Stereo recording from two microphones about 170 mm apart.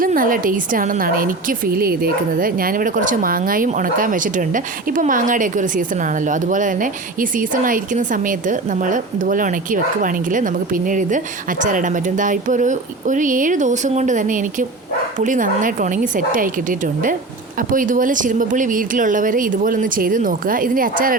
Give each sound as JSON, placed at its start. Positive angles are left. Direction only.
{"t": 0.0, "sound": "a woman's voice", "side_deg": -55}